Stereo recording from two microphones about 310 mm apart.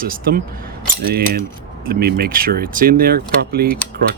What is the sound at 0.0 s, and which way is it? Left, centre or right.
Speech, right.